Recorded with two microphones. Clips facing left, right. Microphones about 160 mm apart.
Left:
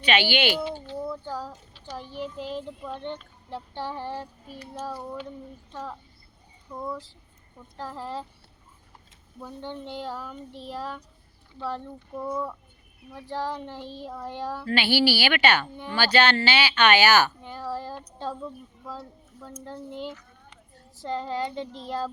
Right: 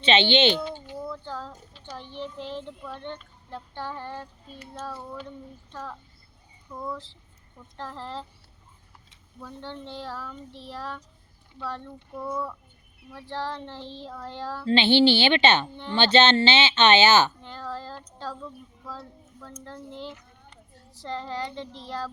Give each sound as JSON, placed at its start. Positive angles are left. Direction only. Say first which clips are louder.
{"t": 0.0, "sound": "speech", "louder": "right 3 dB", "side_deg": -25}
{"t": 0.5, "sound": "speech", "louder": "left 1 dB", "side_deg": 10}
{"t": 0.9, "sound": "a sound", "louder": "left 3 dB", "side_deg": 15}
{"t": 2.0, "sound": "a child's voice", "louder": "left 2 dB", "side_deg": 10}
{"t": 6.7, "sound": "speech", "louder": "left 2 dB", "side_deg": 0}
{"t": 7.8, "sound": "a child's voice", "louder": "left 2 dB", "side_deg": 10}
{"t": 9.4, "sound": "a child's voice", "louder": "left 2 dB", "side_deg": 15}
{"t": 14.7, "sound": "speech", "louder": "right 5 dB", "side_deg": -25}
{"t": 17.4, "sound": "a child's voice", "louder": "left 3 dB", "side_deg": 15}